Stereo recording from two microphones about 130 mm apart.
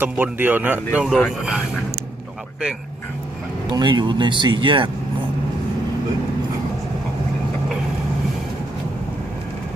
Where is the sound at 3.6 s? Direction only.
35° right (ahead or behind).